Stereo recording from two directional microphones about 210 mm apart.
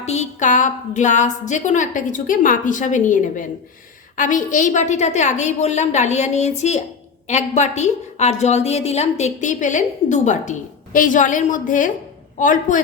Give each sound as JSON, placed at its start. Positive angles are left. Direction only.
{"t": 0.0, "sound": "a woman's voice", "side_deg": 30}